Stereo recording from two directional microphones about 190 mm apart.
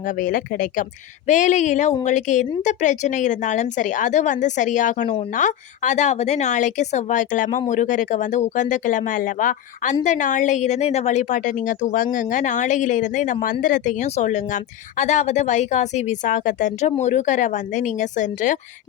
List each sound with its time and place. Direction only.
0.0 s speech: 45° left (ahead or behind)